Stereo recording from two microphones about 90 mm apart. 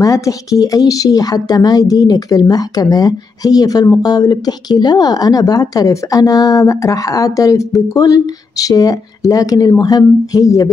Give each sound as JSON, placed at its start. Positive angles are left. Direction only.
{"t": 0.0, "sound": "speech", "side_deg": 40}